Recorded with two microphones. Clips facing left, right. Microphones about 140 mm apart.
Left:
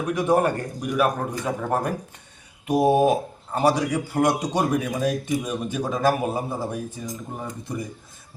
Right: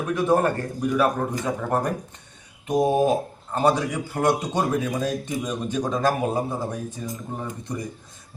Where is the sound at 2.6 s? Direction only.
10° left (ahead or behind).